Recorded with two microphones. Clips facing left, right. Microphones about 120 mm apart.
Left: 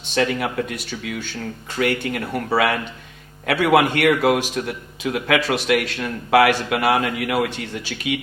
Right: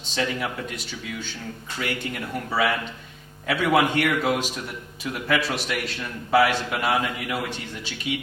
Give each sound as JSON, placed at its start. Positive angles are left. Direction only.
{"t": 0.0, "sound": "speech", "side_deg": 60}
{"t": 1.8, "sound": "a man's voice", "side_deg": 65}
{"t": 5.0, "sound": "a man's voice", "side_deg": 90}